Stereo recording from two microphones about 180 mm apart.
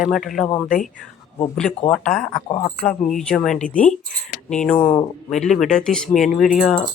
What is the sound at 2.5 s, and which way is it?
Speech, 25° left (ahead or behind).